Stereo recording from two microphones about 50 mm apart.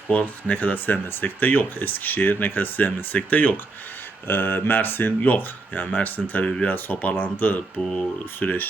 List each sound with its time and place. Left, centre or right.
0.1 s speech: left
4.3 s speech: left